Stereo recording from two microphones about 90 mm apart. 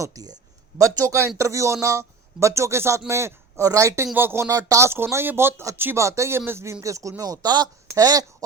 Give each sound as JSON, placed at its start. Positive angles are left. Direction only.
{"t": 0.0, "sound": "speech", "side_deg": -40}
{"t": 4.4, "sound": "speech", "side_deg": -40}
{"t": 4.9, "sound": "speech", "side_deg": -25}